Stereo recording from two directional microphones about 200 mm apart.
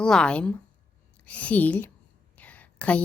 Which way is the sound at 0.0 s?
5° left (ahead or behind).